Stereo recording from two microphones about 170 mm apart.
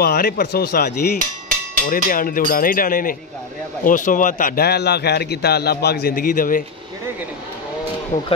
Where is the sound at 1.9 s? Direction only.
55° left (ahead or behind).